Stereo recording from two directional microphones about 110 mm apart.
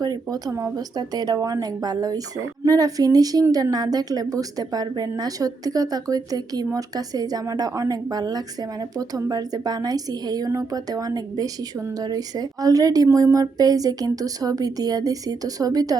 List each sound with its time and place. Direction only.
0.0 s a woman's voice: 35° right (ahead or behind)